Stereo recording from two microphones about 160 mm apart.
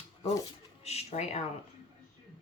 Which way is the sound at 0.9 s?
40° left (ahead or behind).